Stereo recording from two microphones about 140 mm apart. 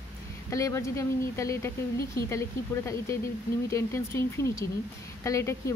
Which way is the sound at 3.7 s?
20° left (ahead or behind).